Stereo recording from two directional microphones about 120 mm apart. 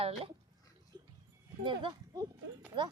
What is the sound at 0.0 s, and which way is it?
Speech, 55° right (ahead or behind).